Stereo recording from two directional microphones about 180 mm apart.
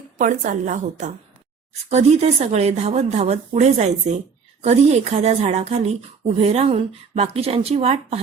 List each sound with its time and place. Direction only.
0.2 s a woman's voice: 45° right (ahead or behind)